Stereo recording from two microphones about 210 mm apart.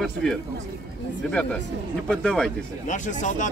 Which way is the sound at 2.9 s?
35° left (ahead or behind).